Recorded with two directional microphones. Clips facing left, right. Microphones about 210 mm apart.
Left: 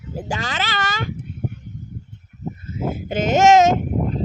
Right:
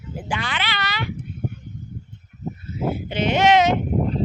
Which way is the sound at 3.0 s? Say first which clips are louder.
Left 4 dB; 45° left (ahead or behind).